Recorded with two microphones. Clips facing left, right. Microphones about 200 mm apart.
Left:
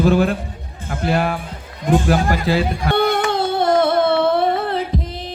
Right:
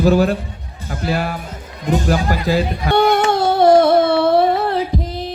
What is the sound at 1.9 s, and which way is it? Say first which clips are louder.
Music: left 1 dB; 40° right (ahead or behind).